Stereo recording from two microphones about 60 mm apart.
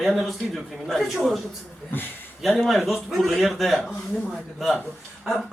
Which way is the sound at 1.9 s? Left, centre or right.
Left.